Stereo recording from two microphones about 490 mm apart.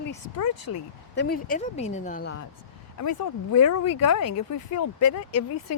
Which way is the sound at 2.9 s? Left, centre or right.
Left.